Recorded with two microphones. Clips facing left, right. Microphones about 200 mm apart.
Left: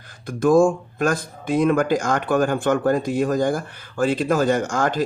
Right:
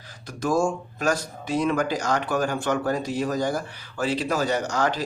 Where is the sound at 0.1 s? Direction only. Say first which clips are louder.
Left 8 dB; 55° left (ahead or behind).